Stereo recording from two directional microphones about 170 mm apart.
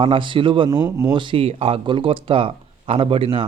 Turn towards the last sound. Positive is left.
turn(degrees=-30)  # may be behind; listen again after turning